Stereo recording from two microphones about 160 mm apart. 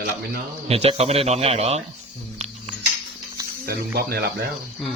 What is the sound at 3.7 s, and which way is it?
Speech, 85° right.